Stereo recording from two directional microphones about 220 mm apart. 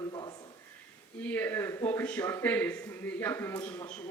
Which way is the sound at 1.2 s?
10° left (ahead or behind).